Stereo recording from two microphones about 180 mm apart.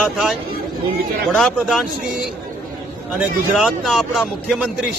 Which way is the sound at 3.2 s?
Centre (ahead or behind).